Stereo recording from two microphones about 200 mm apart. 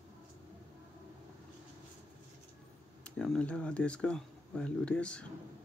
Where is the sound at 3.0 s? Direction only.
5° left (ahead or behind).